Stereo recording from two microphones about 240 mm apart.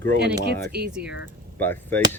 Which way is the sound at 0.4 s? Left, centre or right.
Right.